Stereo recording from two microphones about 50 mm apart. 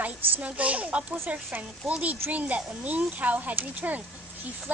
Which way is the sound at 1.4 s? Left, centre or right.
Right.